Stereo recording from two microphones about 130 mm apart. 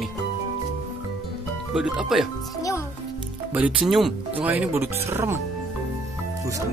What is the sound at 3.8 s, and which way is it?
Speech, centre (ahead or behind).